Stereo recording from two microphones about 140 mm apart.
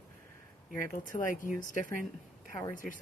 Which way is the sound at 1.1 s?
40° left (ahead or behind).